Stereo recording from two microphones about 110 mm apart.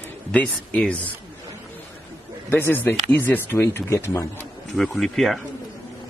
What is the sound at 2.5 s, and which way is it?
Speech, 20° left (ahead or behind).